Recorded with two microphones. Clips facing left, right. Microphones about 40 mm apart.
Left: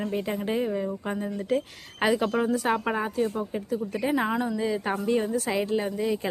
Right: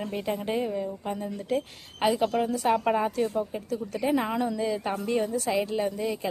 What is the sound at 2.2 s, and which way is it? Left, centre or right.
A woman's voice, centre.